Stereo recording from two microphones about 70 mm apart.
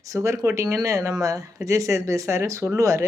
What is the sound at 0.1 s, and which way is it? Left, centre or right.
Speech, right.